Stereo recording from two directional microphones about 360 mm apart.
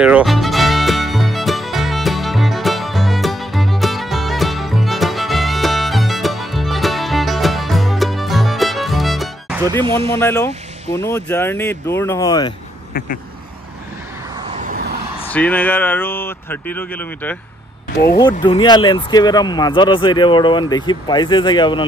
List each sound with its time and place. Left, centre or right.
0.0 s music: centre
9.7 s speech: centre
10.1 s speech: centre
14.5 s vehicle: right
15.1 s speech: centre